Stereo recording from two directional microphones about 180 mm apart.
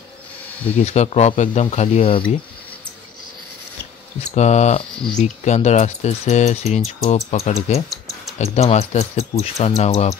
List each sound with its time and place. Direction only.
0.7 s speech: 35° left (ahead or behind)
4.2 s speech: 40° left (ahead or behind)